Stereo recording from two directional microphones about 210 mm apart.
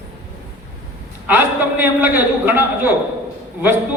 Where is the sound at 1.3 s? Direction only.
10° right (ahead or behind).